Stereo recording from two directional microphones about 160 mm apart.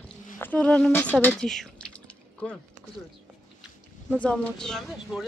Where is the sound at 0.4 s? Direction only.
10° left (ahead or behind).